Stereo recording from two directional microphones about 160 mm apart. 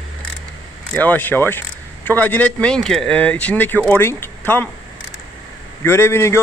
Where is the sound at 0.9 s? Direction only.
10° left (ahead or behind).